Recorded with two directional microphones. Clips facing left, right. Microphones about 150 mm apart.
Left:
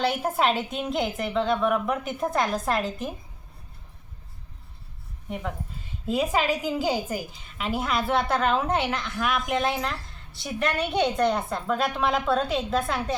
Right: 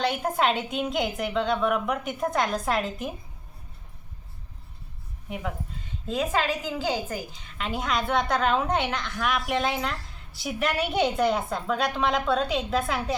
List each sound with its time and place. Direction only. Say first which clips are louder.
0.0 s a woman's voice: left 1 dB; 5° left (ahead or behind)
5.3 s a woman's voice: left 1 dB; 5° right (ahead or behind)
6.1 s a woman's voice: left 2 dB; 10° left (ahead or behind)